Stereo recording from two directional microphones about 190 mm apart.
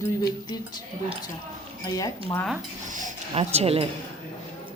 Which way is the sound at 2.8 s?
40° right (ahead or behind).